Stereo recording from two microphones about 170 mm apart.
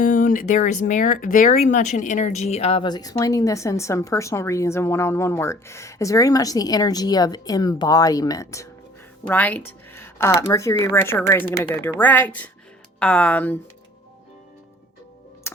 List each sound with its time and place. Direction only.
0.0 s speech: 50° left (ahead or behind); by 13.6 s 10° left (ahead or behind)
15.5 s music: 15° left (ahead or behind)